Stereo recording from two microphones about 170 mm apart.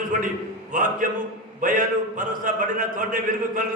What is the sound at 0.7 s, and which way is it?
A man's voice, 50° right (ahead or behind).